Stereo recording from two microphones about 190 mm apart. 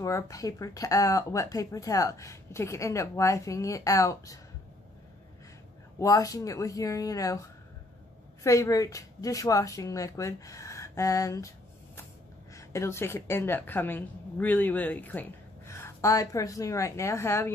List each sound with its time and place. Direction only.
0.0 s a woman's voice: 15° left (ahead or behind)
5.9 s a woman's voice: 20° left (ahead or behind)
8.5 s a woman's voice: 15° left (ahead or behind)
12.5 s a woman's voice: 15° left (ahead or behind)